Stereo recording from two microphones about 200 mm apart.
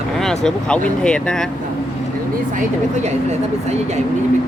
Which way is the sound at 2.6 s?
35° right (ahead or behind).